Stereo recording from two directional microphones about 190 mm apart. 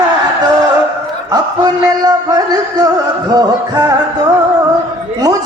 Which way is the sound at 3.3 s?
20° right (ahead or behind).